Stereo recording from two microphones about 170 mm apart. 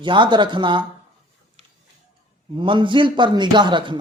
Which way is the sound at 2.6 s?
30° right (ahead or behind).